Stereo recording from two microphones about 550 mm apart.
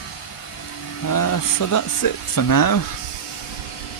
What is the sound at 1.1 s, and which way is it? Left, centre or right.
Speech, left.